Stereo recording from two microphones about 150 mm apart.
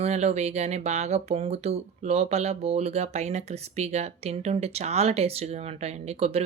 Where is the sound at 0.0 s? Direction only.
45° right (ahead or behind).